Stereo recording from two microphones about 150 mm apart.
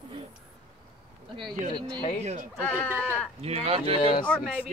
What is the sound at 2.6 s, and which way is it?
Speech, 10° left (ahead or behind).